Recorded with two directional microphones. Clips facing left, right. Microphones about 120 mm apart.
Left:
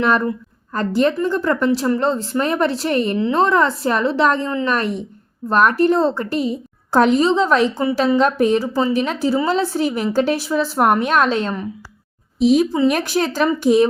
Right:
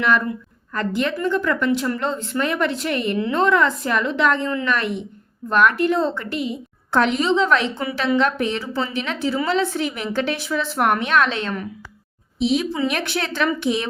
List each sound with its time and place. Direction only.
0.7 s a woman's voice: 35° left (ahead or behind)